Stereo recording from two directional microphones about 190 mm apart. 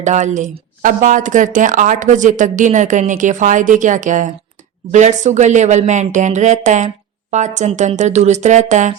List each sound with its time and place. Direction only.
0.0 s speech: 40° right (ahead or behind)